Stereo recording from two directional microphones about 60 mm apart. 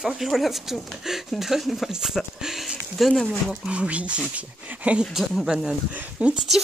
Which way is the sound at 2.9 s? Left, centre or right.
Centre.